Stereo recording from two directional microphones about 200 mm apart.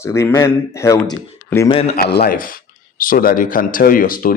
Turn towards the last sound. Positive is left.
turn(degrees=45)  # may be behind; listen again after turning